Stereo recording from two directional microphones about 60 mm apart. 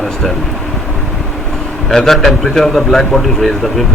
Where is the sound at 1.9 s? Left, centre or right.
Centre.